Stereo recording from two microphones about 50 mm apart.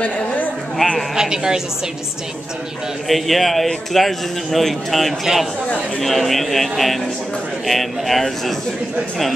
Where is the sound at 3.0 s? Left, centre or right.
Centre.